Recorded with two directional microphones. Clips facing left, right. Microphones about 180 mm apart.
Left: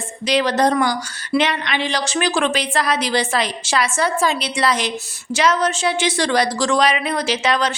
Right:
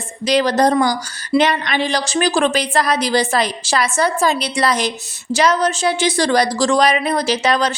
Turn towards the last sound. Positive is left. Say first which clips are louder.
# right 2 dB
turn(degrees=-40)  # may be behind; listen again after turning